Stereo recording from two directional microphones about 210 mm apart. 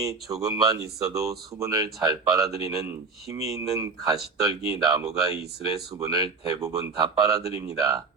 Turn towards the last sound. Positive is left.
turn(degrees=-15)  # may be behind; listen again after turning